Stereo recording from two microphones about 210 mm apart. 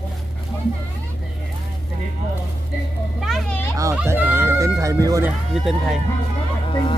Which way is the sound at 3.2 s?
Centre (ahead or behind).